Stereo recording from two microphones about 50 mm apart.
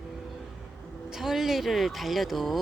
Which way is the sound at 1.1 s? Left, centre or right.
Centre.